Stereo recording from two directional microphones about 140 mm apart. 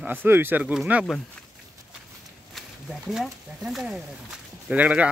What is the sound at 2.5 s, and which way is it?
Speech, centre (ahead or behind).